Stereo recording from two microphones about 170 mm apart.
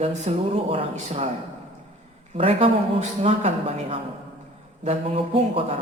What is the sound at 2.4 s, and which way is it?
A man's voice, 35° right (ahead or behind).